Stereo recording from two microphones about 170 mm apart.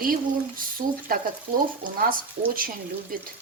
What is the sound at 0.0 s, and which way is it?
Speech, 55° right (ahead or behind).